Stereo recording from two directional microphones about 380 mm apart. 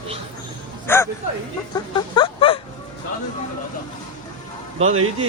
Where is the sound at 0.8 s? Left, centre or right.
Centre.